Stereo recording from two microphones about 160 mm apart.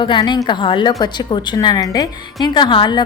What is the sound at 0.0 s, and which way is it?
A woman's voice, 30° left (ahead or behind).